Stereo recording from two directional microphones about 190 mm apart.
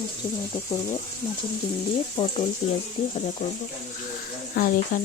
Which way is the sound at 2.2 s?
25° left (ahead or behind).